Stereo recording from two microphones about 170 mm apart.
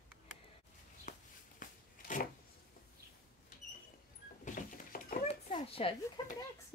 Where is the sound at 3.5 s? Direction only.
55° left (ahead or behind).